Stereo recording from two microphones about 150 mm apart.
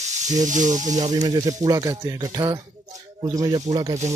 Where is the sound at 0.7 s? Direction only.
25° right (ahead or behind).